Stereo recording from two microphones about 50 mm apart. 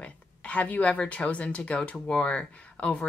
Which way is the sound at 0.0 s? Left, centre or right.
Left.